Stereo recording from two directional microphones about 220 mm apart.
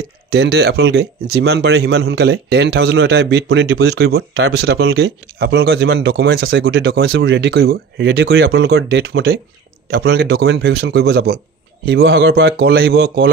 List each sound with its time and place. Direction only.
0.3 s a man's voice: 45° right (ahead or behind)
6.7 s a man's voice: 60° right (ahead or behind)